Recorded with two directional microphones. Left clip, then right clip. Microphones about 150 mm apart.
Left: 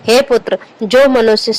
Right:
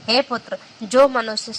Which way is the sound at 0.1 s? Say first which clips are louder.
Left 10 dB; 30° left (ahead or behind).